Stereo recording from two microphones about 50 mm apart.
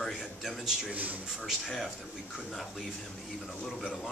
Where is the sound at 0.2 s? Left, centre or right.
Centre.